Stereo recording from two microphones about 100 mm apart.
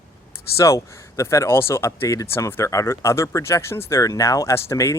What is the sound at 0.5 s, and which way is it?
Speech, 30° left (ahead or behind).